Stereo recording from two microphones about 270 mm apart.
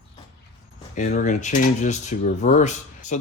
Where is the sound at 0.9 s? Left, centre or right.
Left.